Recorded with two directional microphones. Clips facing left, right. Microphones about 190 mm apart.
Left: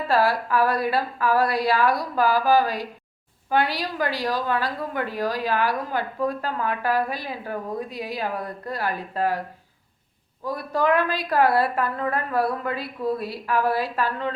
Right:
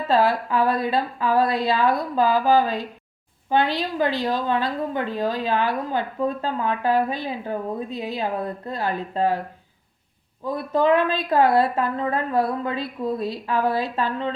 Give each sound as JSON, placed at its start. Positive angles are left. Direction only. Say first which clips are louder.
{"t": 0.1, "sound": "a woman's voice", "louder": "right 2 dB", "side_deg": -20}
{"t": 10.4, "sound": "a woman's voice", "louder": "right 3 dB", "side_deg": -20}